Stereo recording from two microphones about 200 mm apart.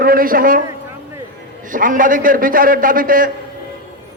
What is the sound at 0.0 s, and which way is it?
Speech, 45° right (ahead or behind).